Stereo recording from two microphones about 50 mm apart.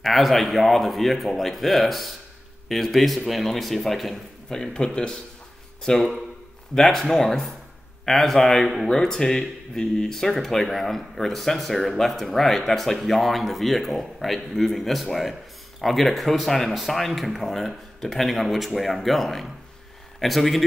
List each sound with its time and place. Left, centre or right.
0.0 s speech: centre
4.5 s speech: centre
5.9 s speech: centre